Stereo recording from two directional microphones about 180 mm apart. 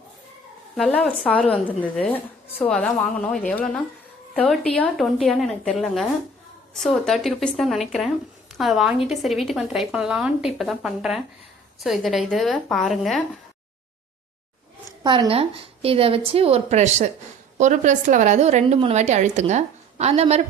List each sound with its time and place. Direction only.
0.8 s a woman's voice: 5° left (ahead or behind)
15.0 s a woman's voice: 25° right (ahead or behind)